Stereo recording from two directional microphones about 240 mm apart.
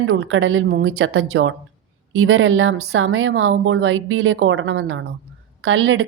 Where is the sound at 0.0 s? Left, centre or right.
Right.